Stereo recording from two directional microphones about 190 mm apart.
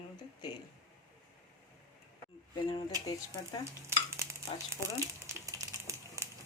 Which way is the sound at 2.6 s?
25° left (ahead or behind).